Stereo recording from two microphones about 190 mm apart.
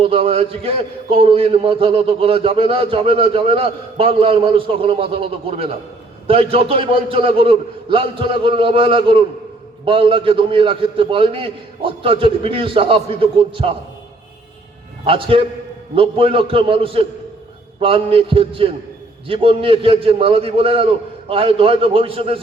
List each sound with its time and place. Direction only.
0.0 s a man's voice: 30° right (ahead or behind)
15.0 s a man's voice: 30° right (ahead or behind)